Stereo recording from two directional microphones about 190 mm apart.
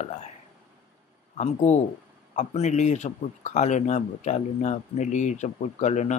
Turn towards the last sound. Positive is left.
turn(degrees=40)  # may be behind; listen again after turning